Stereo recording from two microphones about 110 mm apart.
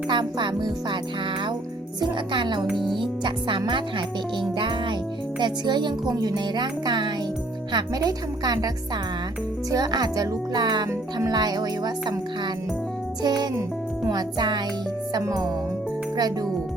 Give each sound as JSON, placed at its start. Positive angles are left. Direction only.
{"t": 0.1, "sound": "speech", "side_deg": -45}
{"t": 2.0, "sound": "speech", "side_deg": -45}
{"t": 9.7, "sound": "speech", "side_deg": -35}
{"t": 13.2, "sound": "speech", "side_deg": -40}